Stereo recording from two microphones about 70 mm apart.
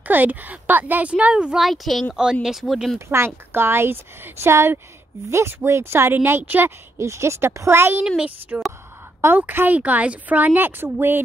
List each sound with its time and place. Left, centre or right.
0.0 s a woman's voice: right
1.6 s speech: centre
3.1 s a woman's voice: right
7.0 s a woman's voice: right
8.5 s a woman's voice: right